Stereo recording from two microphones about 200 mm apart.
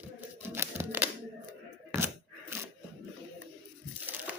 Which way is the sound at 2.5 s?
15° right (ahead or behind).